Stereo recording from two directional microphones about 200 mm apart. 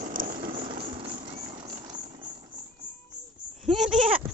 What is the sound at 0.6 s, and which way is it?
Vehicle, 25° right (ahead or behind).